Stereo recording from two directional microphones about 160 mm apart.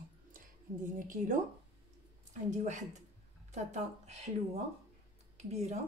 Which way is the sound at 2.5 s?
50° right (ahead or behind).